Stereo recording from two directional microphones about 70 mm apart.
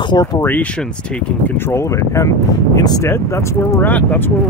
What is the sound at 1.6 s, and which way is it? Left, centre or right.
Speech, left.